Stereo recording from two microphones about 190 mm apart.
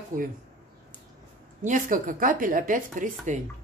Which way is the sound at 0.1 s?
45° right (ahead or behind).